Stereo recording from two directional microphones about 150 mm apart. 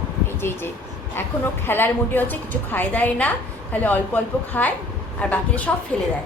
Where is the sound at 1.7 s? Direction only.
15° left (ahead or behind).